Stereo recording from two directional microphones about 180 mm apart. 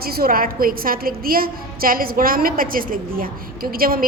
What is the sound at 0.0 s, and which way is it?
A woman's voice, 55° right (ahead or behind).